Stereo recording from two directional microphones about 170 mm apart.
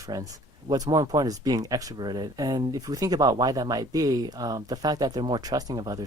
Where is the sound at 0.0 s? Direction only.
20° right (ahead or behind).